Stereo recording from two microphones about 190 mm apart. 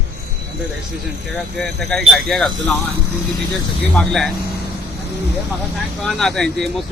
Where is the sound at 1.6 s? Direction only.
5° left (ahead or behind).